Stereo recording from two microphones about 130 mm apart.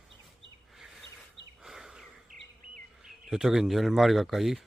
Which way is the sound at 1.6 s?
5° right (ahead or behind).